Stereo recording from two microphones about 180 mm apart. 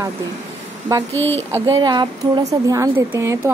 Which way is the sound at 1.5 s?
20° right (ahead or behind).